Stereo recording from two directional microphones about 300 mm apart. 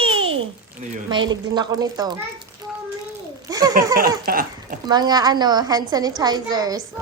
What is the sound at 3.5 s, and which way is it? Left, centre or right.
Speech, centre.